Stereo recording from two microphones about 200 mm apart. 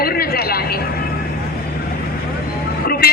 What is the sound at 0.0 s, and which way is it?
Vehicle, 50° left (ahead or behind).